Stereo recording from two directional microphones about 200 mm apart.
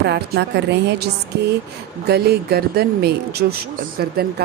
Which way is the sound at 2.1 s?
50° right (ahead or behind).